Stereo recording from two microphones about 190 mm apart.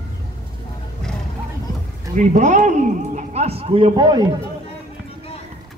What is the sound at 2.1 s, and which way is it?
Speech, 40° right (ahead or behind).